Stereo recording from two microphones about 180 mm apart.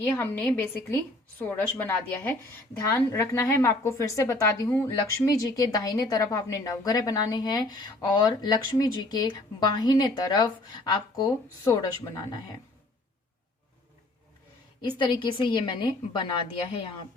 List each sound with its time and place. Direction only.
0.0 s a woman's voice: 10° left (ahead or behind)
14.9 s speech: 25° left (ahead or behind)